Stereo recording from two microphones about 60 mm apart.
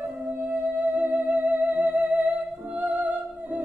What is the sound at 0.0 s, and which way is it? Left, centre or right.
Music, right.